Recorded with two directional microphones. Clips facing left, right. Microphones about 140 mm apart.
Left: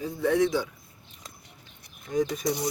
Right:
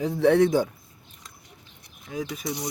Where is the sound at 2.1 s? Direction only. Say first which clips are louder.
Left 5 dB; 5° right (ahead or behind).